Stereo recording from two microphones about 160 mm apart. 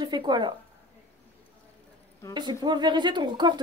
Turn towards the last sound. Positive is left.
turn(degrees=-25)  # may be behind; listen again after turning